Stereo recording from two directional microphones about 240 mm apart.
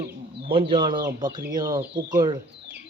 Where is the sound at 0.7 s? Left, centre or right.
Centre.